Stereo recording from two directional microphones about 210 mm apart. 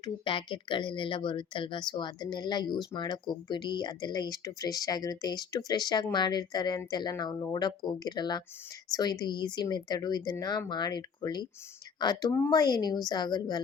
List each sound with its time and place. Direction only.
0.0 s speech: 25° left (ahead or behind)